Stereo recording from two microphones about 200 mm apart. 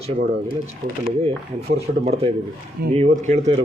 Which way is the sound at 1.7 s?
35° right (ahead or behind).